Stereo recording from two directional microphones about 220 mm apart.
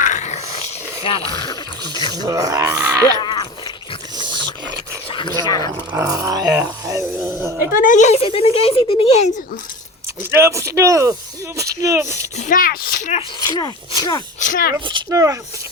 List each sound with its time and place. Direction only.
0.0 s dog: 30° left (ahead or behind)
1.0 s speech: 25° left (ahead or behind)
2.2 s speech: 15° right (ahead or behind)
3.2 s dog: 20° left (ahead or behind)
5.4 s speech: 15° left (ahead or behind)
5.9 s speech: 15° right (ahead or behind)
7.8 s speech: 35° left (ahead or behind)
10.3 s speech: 15° right (ahead or behind)
12.4 s speech: 40° left (ahead or behind)
13.1 s speech: 20° left (ahead or behind)
14.3 s speech: 35° left (ahead or behind)
14.8 s speech: 20° right (ahead or behind)